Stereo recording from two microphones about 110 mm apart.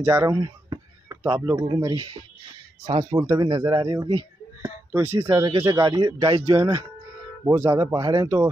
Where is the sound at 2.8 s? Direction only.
45° right (ahead or behind).